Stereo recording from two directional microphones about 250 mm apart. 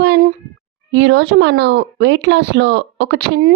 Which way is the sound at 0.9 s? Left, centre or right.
Right.